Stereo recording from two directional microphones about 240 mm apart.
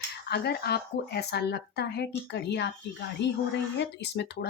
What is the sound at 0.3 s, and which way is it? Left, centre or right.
A woman's voice, left.